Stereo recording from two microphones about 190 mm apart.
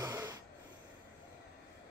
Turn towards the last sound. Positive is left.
turn(degrees=-15)  # may be behind; listen again after turning